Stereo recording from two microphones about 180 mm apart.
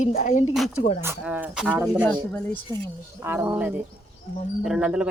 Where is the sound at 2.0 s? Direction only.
10° left (ahead or behind).